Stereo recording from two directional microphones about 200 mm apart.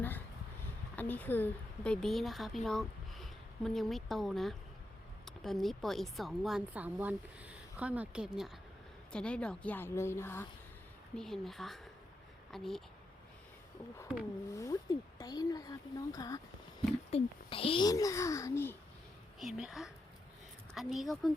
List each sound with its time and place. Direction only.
0.9 s a woman's voice: 10° left (ahead or behind)
11.2 s a woman's voice: centre (ahead or behind)
14.6 s speech: 15° left (ahead or behind)
17.1 s speech: 30° left (ahead or behind); by 18.8 s 10° left (ahead or behind)
19.4 s a woman's voice: centre (ahead or behind)